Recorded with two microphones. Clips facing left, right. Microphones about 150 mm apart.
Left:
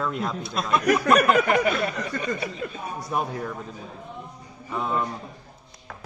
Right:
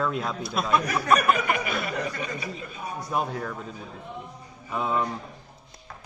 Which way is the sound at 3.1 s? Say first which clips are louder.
Left 1 dB; 5° left (ahead or behind).